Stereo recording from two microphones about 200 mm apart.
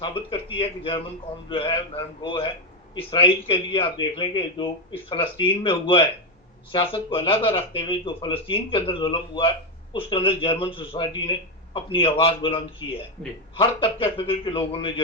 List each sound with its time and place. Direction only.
0.0 s a man's voice: 25° left (ahead or behind)